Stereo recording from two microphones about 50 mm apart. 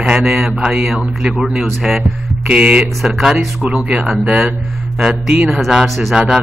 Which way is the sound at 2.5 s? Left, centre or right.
Right.